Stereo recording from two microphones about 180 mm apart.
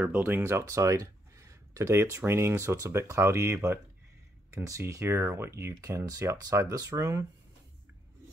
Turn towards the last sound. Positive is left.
turn(degrees=-15)  # may be behind; listen again after turning